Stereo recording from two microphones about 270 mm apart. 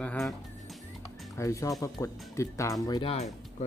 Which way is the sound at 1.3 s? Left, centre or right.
Centre.